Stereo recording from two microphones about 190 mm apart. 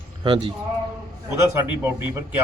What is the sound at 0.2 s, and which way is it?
Speech, 25° right (ahead or behind).